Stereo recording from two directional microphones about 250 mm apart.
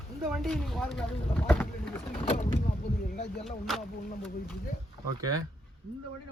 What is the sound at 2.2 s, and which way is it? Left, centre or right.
Vehicle, left.